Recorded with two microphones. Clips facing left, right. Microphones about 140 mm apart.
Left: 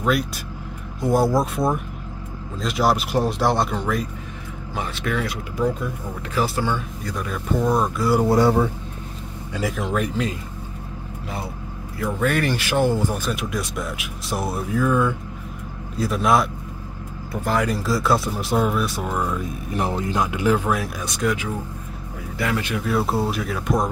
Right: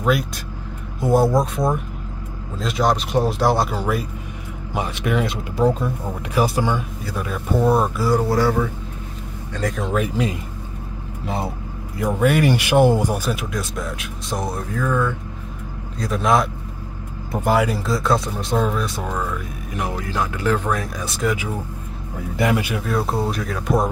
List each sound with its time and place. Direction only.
0.0 s speech: centre (ahead or behind); by 5.9 s 30° right (ahead or behind)
6.3 s speech: 15° right (ahead or behind)
8.3 s speech: 20° left (ahead or behind)
9.5 s speech: 5° left (ahead or behind)
12.0 s speech: 10° right (ahead or behind)
17.5 s speech: 5° right (ahead or behind)
19.8 s speech: 25° left (ahead or behind); by 21.5 s centre (ahead or behind)
22.6 s speech: 10° right (ahead or behind)
22.8 s speech: 5° left (ahead or behind)